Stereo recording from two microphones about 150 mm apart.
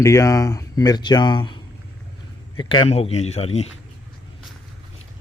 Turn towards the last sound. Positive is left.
turn(degrees=45)  # may be behind; listen again after turning